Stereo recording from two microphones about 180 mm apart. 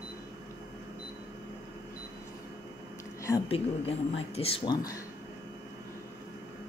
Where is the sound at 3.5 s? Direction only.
35° left (ahead or behind).